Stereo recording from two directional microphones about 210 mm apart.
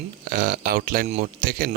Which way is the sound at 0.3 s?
40° right (ahead or behind).